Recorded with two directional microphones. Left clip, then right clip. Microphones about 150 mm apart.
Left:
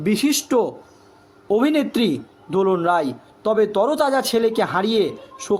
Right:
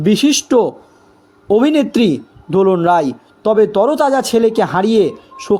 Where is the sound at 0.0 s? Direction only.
40° right (ahead or behind).